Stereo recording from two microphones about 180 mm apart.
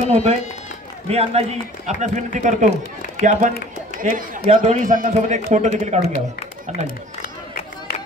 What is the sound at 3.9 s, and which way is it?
A man's voice, 45° right (ahead or behind).